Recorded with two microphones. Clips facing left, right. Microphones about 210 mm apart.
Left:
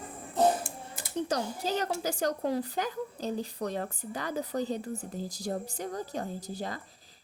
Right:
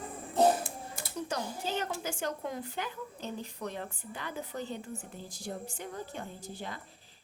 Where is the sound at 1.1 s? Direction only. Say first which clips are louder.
Left 5 dB; 35° left (ahead or behind).